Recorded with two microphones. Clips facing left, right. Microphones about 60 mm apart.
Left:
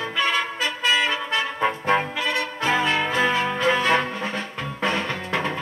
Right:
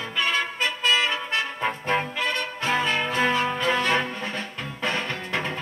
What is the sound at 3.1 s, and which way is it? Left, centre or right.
Music, centre.